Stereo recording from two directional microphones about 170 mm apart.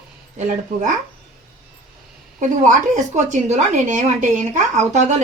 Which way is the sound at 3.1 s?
45° right (ahead or behind).